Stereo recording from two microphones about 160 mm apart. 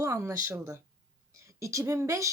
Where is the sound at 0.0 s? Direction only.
20° right (ahead or behind).